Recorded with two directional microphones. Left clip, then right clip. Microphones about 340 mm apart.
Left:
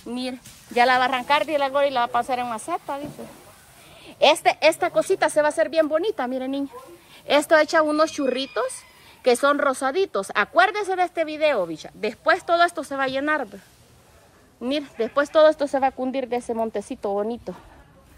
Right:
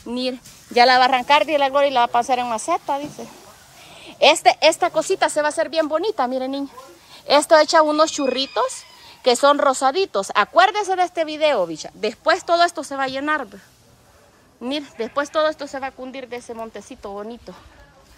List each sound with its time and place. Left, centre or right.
0.1 s a woman's voice: centre
14.6 s a woman's voice: centre